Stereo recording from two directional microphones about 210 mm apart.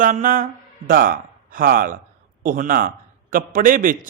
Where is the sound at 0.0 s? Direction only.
40° right (ahead or behind).